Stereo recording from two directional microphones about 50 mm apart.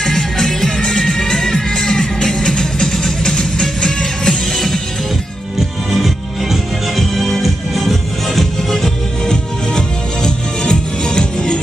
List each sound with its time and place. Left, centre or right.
0.0 s music: centre
6.5 s music: centre